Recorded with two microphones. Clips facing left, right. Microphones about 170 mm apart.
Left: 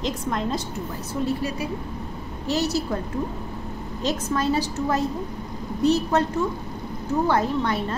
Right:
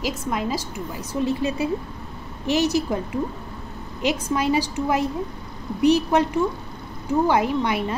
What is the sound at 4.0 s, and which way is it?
A woman's voice, 15° right (ahead or behind).